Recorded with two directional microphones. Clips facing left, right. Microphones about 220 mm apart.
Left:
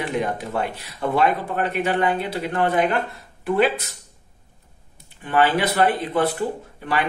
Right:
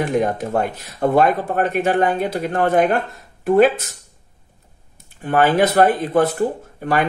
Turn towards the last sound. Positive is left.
turn(degrees=-45)  # may be behind; listen again after turning